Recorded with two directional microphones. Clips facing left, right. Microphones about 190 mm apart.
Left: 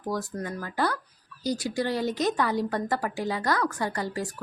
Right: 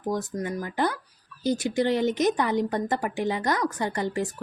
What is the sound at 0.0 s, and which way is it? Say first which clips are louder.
Speech: right 3 dB; 20° right (ahead or behind).